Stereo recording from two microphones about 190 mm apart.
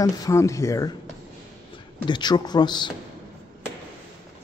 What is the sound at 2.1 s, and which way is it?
Speech, 20° left (ahead or behind).